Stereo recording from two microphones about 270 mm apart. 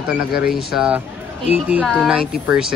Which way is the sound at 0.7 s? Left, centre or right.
Centre.